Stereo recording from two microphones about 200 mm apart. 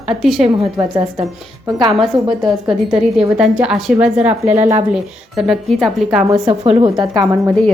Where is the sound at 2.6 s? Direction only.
5° right (ahead or behind).